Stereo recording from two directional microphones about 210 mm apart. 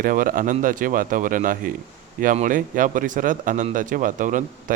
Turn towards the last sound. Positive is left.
turn(degrees=-40)  # may be behind; listen again after turning